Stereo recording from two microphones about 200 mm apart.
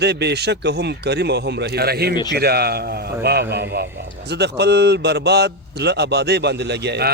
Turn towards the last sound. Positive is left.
turn(degrees=-55)  # may be behind; listen again after turning